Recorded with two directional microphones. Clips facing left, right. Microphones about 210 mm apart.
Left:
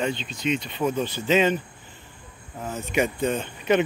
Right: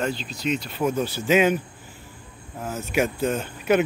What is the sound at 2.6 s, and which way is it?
Speech, 5° right (ahead or behind).